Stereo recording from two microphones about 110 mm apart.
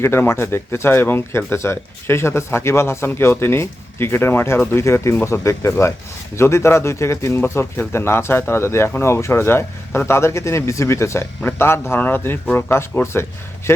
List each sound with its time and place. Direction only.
0.0 s speech: 25° left (ahead or behind)